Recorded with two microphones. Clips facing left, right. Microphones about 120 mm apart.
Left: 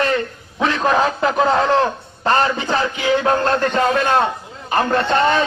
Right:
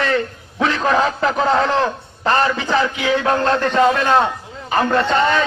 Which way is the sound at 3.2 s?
5° left (ahead or behind).